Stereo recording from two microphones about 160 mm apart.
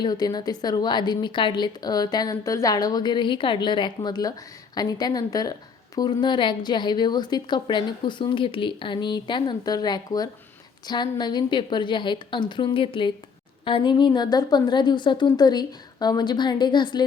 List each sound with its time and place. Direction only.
0.0 s a woman's voice: 25° left (ahead or behind)